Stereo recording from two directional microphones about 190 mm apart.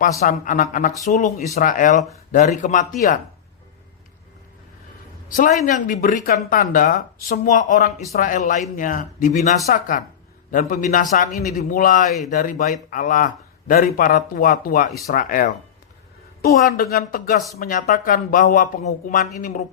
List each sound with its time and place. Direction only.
0.2 s speech: 45° left (ahead or behind)
5.6 s speech: 45° left (ahead or behind)